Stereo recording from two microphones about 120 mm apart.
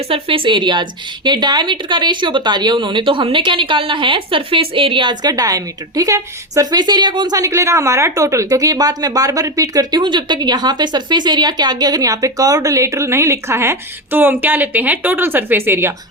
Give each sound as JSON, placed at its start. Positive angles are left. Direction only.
{"t": 0.1, "sound": "a woman's voice", "side_deg": -45}